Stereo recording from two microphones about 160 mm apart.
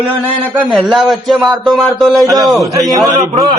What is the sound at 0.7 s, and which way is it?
Speech, centre (ahead or behind).